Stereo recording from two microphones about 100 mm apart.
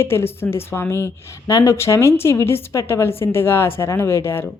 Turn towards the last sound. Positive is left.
turn(degrees=25)  # may be behind; listen again after turning